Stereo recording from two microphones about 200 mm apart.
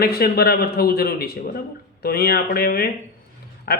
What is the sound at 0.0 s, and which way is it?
A man's voice, 50° left (ahead or behind).